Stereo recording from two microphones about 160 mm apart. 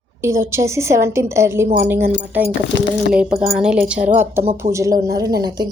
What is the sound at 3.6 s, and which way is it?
A woman's voice, 5° right (ahead or behind).